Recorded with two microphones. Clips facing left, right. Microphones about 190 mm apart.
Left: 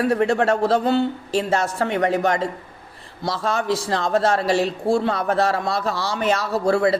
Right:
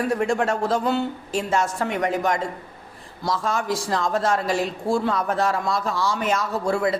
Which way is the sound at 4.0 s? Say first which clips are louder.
Left 3 dB; 65° left (ahead or behind).